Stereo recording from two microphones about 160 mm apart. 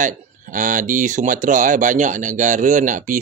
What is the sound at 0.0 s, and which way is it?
Speech, 55° right (ahead or behind).